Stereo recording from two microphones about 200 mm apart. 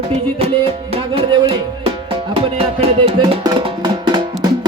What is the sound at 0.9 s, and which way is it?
Music, 25° right (ahead or behind).